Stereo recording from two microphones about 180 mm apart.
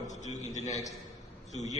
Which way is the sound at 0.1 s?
40° left (ahead or behind).